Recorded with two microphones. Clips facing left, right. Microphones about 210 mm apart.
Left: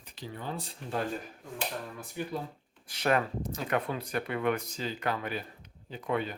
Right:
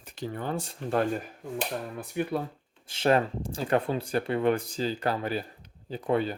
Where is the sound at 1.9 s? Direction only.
60° right (ahead or behind).